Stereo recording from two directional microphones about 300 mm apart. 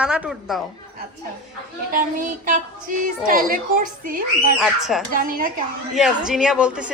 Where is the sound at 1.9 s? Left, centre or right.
Right.